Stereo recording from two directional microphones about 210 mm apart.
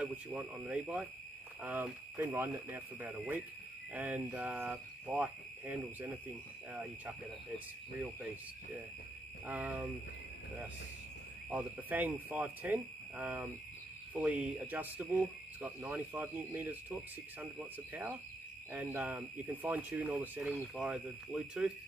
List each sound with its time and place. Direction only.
0.0 s speech: 10° right (ahead or behind)
9.5 s speech: 10° right (ahead or behind)
11.5 s speech: 10° right (ahead or behind)
18.7 s speech: 10° right (ahead or behind)